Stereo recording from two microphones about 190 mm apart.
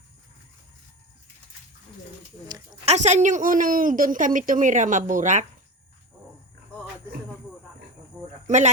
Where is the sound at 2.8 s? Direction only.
35° right (ahead or behind).